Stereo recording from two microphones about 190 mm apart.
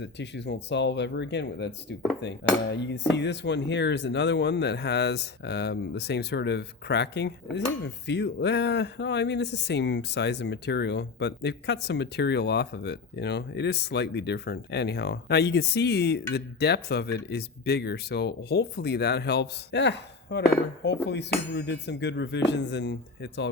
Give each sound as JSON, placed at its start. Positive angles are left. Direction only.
{"t": 0.0, "sound": "cutlery", "side_deg": 65}